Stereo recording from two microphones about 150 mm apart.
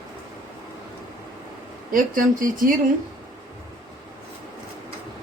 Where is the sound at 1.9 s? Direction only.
65° right (ahead or behind).